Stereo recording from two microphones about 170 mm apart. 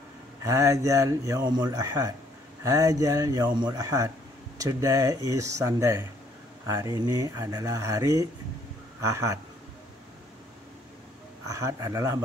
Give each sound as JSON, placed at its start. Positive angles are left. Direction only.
{"t": 0.4, "sound": "a man's voice", "side_deg": -20}
{"t": 11.4, "sound": "speech", "side_deg": -20}